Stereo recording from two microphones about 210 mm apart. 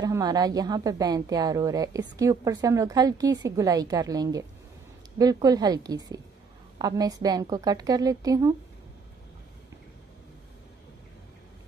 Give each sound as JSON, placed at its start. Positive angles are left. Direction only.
{"t": 0.0, "sound": "a woman's voice", "side_deg": -20}